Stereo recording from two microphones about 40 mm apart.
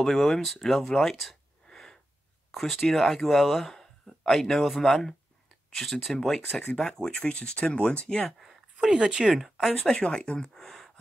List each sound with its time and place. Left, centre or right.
0.0 s speech: centre
1.7 s wheeze: centre
2.5 s speech: centre
6.0 s speech: centre
6.8 s speech: left
8.8 s speech: centre
9.3 s speech: centre
9.8 s speech: centre
10.5 s a sound: centre